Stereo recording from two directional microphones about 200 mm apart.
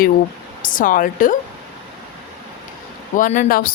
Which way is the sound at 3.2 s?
40° left (ahead or behind).